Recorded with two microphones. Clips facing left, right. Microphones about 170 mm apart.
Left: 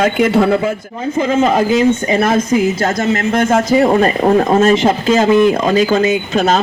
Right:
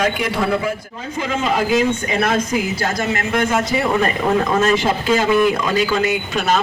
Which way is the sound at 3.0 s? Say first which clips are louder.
Left 5 dB; 40° left (ahead or behind).